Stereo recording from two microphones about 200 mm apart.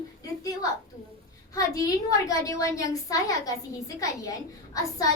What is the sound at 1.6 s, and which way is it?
A woman's voice, 15° left (ahead or behind).